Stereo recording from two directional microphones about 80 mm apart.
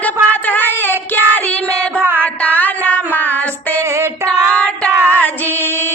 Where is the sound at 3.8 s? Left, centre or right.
Right.